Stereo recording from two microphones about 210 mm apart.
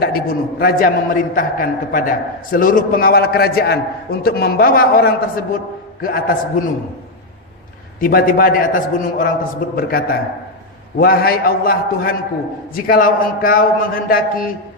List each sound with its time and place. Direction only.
0.0 s a man's voice: 45° left (ahead or behind)
7.9 s a man's voice: 40° left (ahead or behind)